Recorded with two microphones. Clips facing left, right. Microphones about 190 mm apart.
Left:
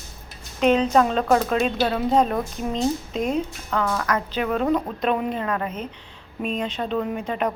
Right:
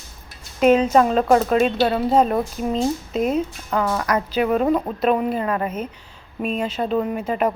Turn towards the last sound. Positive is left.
turn(degrees=-5)  # may be behind; listen again after turning